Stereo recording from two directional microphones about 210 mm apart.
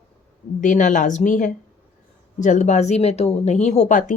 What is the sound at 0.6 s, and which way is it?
Speech, 35° left (ahead or behind).